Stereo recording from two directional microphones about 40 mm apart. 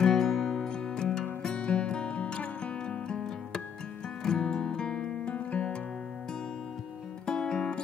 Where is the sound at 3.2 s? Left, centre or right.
Centre.